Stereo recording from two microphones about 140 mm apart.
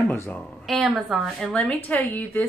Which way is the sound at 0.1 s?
15° left (ahead or behind).